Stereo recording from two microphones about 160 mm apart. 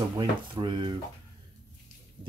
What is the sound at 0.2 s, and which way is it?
Speech, 30° right (ahead or behind).